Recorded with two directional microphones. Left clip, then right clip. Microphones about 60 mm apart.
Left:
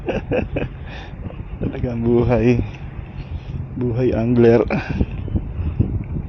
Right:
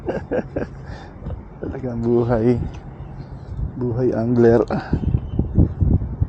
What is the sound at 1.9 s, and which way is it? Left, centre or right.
Speech, centre.